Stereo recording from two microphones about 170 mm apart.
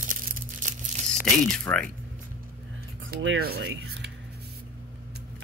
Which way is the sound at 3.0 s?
65° right (ahead or behind).